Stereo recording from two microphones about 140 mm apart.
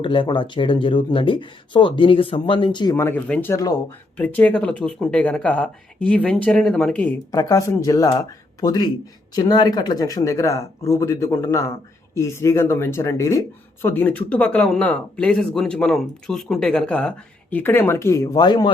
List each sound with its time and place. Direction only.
0.0 s speech: 35° left (ahead or behind)
2.9 s speech: 15° left (ahead or behind)
3.5 s speech: 25° left (ahead or behind)
4.2 s speech: 10° left (ahead or behind)
7.3 s speech: 25° left (ahead or behind)